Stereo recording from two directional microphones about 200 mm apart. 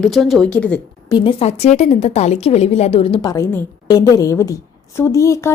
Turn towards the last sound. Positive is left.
turn(degrees=15)  # may be behind; listen again after turning